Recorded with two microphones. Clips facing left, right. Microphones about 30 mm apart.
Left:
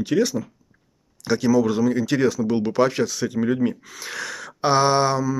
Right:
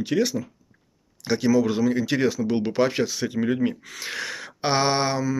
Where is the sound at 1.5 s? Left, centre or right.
Right.